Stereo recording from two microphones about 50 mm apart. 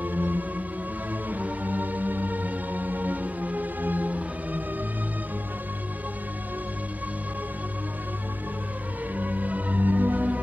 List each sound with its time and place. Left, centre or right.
0.0 s music: right
9.1 s music: right